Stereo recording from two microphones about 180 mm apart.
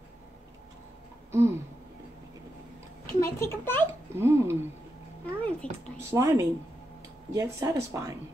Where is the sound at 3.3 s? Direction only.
15° left (ahead or behind).